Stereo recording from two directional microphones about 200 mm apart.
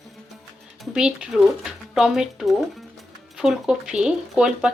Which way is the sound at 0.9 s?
5° right (ahead or behind).